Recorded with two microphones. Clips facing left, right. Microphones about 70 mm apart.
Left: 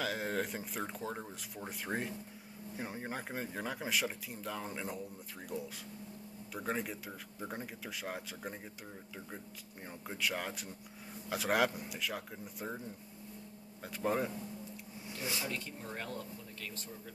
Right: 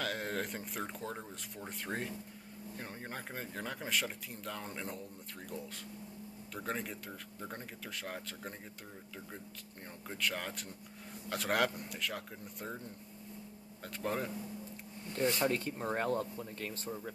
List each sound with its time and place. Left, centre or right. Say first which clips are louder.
0.0 s speech: left 1 dB; centre
6.5 s speech: left 2 dB; centre
10.0 s speech: left 1 dB; centre
15.4 s speech: right 8 dB; right